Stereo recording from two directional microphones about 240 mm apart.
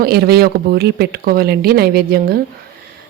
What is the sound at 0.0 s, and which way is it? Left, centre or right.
Speech, right.